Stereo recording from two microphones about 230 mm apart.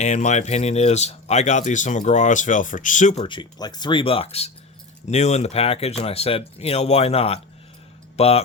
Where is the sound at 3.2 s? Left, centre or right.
Centre.